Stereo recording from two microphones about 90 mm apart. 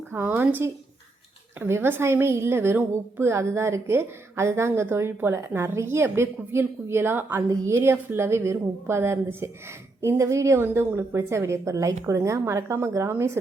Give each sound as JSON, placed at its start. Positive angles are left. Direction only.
{"t": 0.1, "sound": "a woman's voice", "side_deg": -25}